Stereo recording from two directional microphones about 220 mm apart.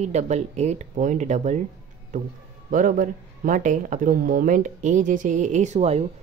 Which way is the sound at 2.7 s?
35° right (ahead or behind).